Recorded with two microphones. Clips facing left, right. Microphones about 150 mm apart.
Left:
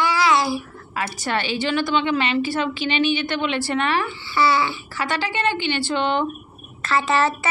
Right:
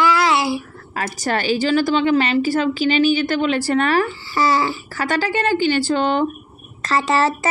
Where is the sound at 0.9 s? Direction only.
40° right (ahead or behind).